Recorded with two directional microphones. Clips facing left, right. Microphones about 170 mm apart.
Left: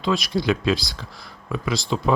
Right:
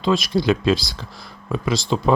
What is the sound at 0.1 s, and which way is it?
Speech, 35° right (ahead or behind).